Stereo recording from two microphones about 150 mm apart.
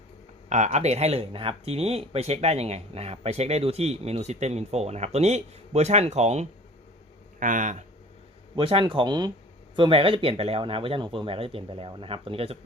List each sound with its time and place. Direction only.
0.5 s speech: 50° right (ahead or behind)
7.3 s speech: 60° right (ahead or behind)
8.5 s speech: 35° right (ahead or behind)